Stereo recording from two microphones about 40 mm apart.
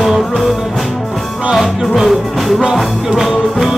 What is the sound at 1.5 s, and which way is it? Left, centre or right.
Music, centre.